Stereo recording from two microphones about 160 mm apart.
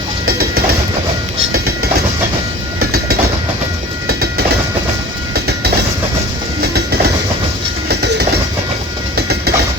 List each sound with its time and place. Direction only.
0.3 s train: 75° right (ahead or behind)
4.0 s train: 75° right (ahead or behind)